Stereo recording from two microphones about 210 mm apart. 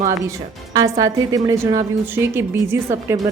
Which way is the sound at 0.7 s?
15° right (ahead or behind).